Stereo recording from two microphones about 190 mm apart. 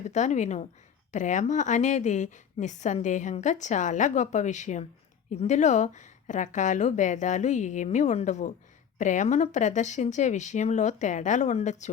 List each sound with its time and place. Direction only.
0.1 s a woman's voice: 40° left (ahead or behind)